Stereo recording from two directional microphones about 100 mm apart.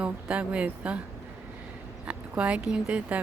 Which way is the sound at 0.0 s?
10° right (ahead or behind).